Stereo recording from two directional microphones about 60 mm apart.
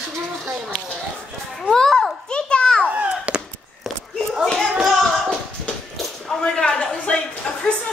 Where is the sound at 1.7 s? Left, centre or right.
Centre.